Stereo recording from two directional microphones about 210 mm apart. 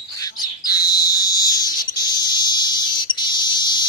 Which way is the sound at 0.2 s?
20° left (ahead or behind).